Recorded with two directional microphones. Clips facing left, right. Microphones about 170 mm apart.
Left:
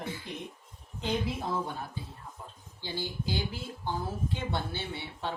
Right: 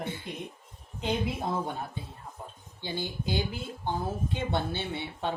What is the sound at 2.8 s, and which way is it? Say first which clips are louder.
Speech: right 2 dB; 20° right (ahead or behind).